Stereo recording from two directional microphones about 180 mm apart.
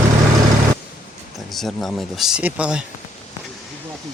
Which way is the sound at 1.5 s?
Centre (ahead or behind).